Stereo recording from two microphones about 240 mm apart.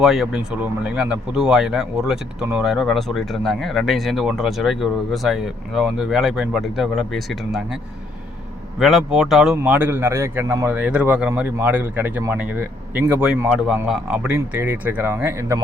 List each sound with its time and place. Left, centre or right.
0.0 s speech: centre
8.8 s speech: centre